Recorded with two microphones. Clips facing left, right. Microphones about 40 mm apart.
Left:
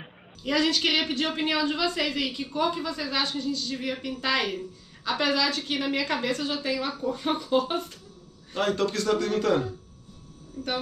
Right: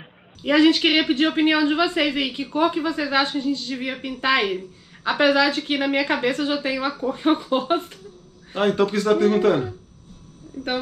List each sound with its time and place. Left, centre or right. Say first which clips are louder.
0.4 s speech: right 8 dB; right